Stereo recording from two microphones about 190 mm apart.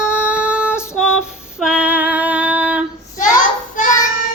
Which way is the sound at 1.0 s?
5° right (ahead or behind).